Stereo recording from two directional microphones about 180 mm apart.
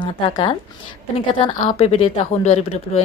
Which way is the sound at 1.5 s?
30° left (ahead or behind).